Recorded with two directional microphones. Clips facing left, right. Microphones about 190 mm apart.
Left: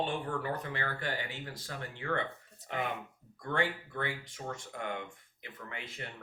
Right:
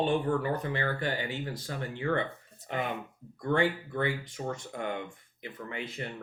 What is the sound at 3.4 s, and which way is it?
Speech, 20° right (ahead or behind).